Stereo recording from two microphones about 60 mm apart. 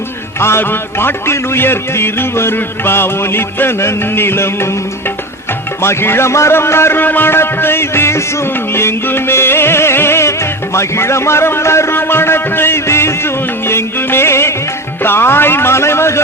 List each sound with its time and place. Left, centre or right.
0.3 s music: left
5.8 s a man's voice: left
8.7 s music: left
10.8 s a man's voice: left